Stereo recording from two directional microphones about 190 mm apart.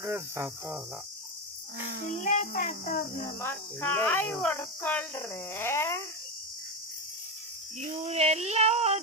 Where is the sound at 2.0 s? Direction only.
40° left (ahead or behind).